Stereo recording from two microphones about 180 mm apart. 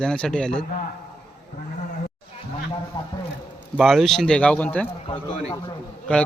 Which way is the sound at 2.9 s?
25° left (ahead or behind).